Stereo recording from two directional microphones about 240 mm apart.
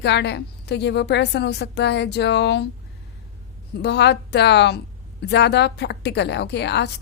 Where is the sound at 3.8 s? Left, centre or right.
Left.